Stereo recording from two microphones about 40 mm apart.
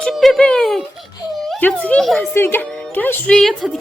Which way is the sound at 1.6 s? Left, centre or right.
Left.